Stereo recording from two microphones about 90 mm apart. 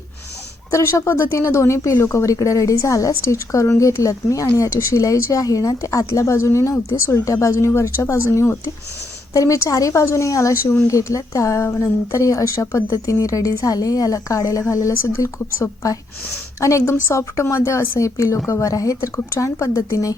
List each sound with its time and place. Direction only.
0.7 s speech: 30° left (ahead or behind)